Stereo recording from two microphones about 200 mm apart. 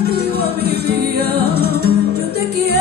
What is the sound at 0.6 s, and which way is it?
Music, 50° right (ahead or behind).